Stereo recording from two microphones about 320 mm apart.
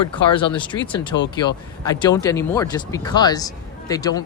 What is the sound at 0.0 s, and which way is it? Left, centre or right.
Speech, centre.